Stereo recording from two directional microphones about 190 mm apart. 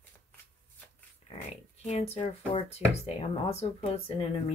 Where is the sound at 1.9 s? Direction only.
35° left (ahead or behind).